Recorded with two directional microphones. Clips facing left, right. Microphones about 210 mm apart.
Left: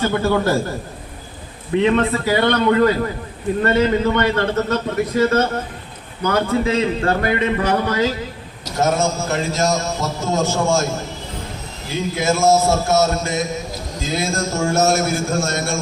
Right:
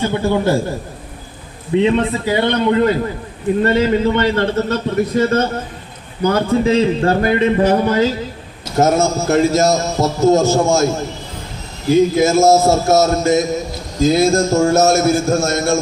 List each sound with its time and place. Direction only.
0.0 s a man's voice: 20° right (ahead or behind)
1.8 s a man's voice: 20° right (ahead or behind)
8.8 s a man's voice: 40° right (ahead or behind)
11.9 s a man's voice: 40° right (ahead or behind)